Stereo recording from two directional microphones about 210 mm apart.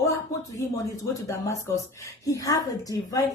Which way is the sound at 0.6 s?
15° left (ahead or behind).